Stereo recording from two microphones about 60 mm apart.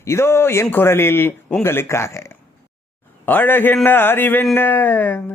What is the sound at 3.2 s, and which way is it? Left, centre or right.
Speech, left.